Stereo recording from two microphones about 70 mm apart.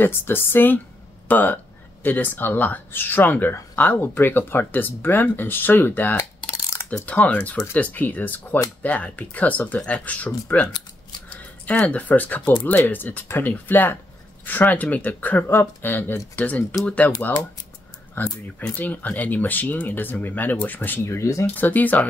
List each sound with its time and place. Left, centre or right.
0.0 s speech: left
18.2 s speech: left
21.0 s speech: left
21.5 s speech: left